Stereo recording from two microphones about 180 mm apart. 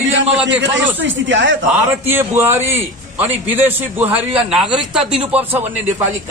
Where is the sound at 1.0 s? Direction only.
90° right.